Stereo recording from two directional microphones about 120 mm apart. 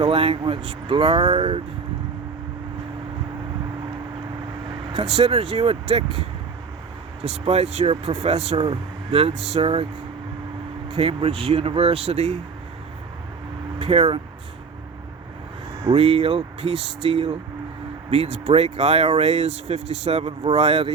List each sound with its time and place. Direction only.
0.0 s speech: 50° right (ahead or behind)
4.7 s speech: 50° right (ahead or behind)
8.6 s speech: 45° right (ahead or behind)
10.9 s speech: 50° right (ahead or behind)
13.7 s speech: 55° right (ahead or behind)
15.8 s speech: 50° right (ahead or behind)